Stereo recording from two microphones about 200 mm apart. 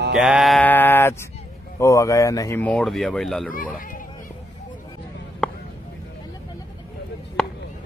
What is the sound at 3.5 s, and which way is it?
Speech, 45° left (ahead or behind).